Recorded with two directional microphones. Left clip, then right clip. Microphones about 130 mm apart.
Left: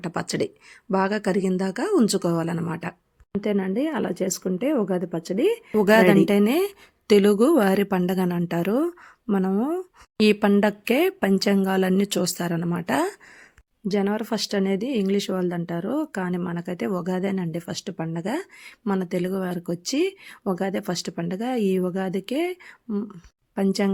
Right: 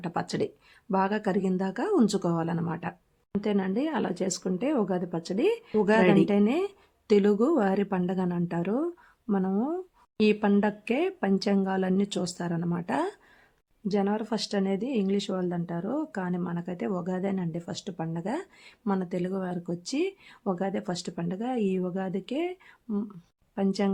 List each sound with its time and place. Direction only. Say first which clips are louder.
0.0 s speech: left 3 dB; 25° left (ahead or behind)